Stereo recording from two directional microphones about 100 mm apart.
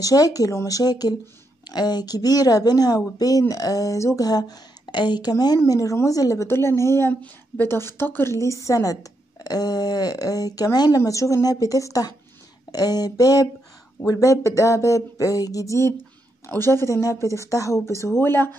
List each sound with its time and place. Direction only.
0.0 s a woman's voice: 35° left (ahead or behind); by 18.5 s 20° left (ahead or behind)